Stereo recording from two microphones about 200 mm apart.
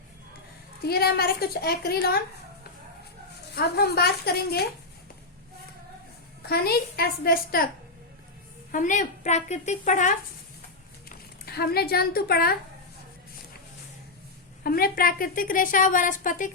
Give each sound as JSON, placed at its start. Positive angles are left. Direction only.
{"t": 0.8, "sound": "a woman's voice", "side_deg": 50}
{"t": 3.5, "sound": "a woman's voice", "side_deg": 50}
{"t": 6.4, "sound": "a woman's voice", "side_deg": 50}
{"t": 8.7, "sound": "a woman's voice", "side_deg": 40}
{"t": 11.1, "sound": "speech", "side_deg": 50}
{"t": 14.6, "sound": "a woman's voice", "side_deg": 50}